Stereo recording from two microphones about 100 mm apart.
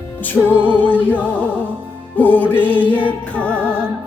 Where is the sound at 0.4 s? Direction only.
20° left (ahead or behind).